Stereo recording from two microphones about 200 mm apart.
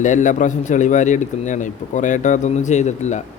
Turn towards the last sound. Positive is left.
turn(degrees=35)  # may be behind; listen again after turning